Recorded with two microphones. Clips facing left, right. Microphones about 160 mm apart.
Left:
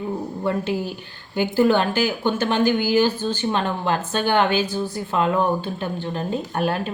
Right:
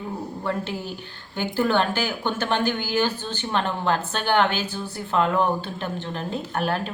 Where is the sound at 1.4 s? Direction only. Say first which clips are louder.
Left 4 dB; 15° left (ahead or behind).